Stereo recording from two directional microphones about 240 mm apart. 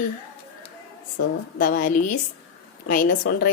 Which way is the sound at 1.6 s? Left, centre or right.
Left.